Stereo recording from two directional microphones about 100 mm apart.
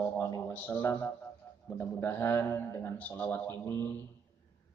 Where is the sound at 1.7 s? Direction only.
25° left (ahead or behind).